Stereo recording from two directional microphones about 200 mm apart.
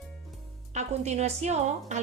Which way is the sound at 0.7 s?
35° right (ahead or behind).